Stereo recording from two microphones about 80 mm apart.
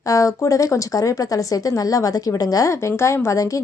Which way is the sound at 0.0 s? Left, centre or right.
Left.